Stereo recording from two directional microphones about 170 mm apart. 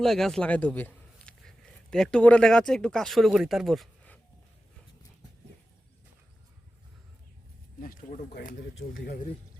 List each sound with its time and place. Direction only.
0.0 s a man's voice: centre (ahead or behind)
7.8 s speech: 55° left (ahead or behind)